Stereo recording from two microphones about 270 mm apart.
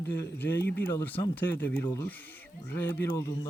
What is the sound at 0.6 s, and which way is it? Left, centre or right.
Speech, left.